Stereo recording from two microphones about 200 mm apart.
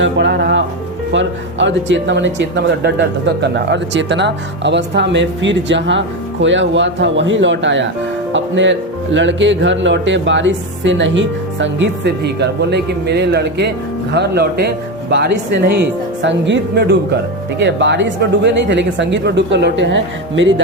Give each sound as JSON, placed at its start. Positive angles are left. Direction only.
{"t": 0.0, "sound": "speech", "side_deg": -60}